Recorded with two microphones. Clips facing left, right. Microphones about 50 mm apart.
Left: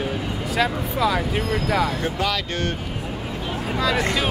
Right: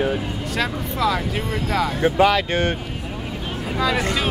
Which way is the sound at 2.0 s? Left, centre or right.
Right.